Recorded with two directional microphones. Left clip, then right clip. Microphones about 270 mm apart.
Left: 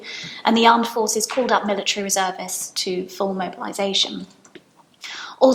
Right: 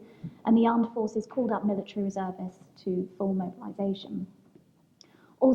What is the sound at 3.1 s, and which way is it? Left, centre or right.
A woman's voice, centre.